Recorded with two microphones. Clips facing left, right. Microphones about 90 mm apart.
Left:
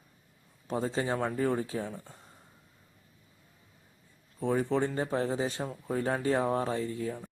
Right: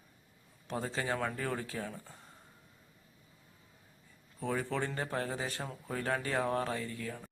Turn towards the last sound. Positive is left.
turn(degrees=20)  # may be behind; listen again after turning